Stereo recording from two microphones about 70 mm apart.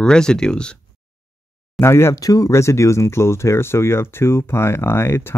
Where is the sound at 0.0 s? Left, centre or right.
Centre.